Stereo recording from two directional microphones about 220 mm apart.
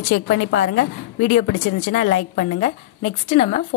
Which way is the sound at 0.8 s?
35° left (ahead or behind).